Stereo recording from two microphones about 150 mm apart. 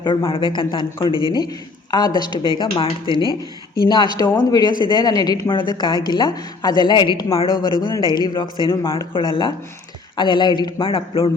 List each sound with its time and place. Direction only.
0.3 s a woman's voice: 35° left (ahead or behind)